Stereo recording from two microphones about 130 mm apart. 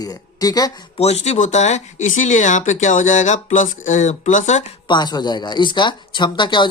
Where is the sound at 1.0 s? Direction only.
55° left (ahead or behind).